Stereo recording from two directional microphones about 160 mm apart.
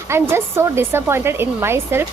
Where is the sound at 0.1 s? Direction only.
15° right (ahead or behind).